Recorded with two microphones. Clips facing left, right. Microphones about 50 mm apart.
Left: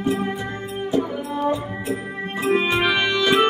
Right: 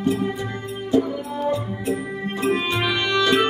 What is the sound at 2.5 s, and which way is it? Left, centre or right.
Music, left.